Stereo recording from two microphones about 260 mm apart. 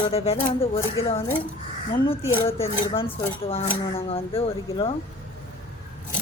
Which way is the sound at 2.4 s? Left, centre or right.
Left.